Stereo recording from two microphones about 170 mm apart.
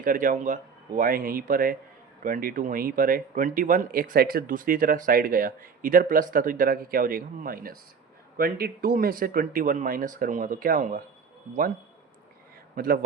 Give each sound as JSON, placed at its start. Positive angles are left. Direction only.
{"t": 0.0, "sound": "a man's voice", "side_deg": -50}
{"t": 12.7, "sound": "speech", "side_deg": -60}